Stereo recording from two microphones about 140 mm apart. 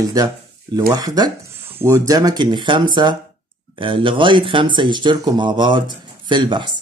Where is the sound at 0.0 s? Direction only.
25° right (ahead or behind).